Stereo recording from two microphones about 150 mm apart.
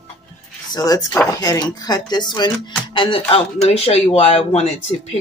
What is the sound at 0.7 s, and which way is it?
Speech, 25° left (ahead or behind).